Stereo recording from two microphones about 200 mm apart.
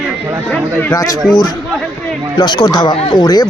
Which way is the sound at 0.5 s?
10° left (ahead or behind).